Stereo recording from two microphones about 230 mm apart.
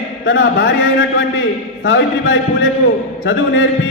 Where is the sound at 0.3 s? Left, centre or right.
Left.